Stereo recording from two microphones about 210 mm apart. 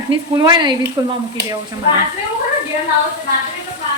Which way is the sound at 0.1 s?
20° right (ahead or behind).